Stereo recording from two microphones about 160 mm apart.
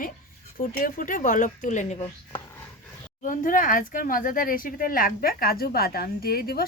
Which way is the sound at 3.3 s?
55° left (ahead or behind).